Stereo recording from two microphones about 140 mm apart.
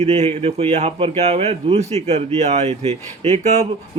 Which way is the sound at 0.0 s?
50° right (ahead or behind).